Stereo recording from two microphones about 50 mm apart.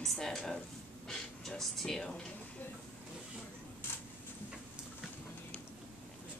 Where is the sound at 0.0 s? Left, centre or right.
Centre.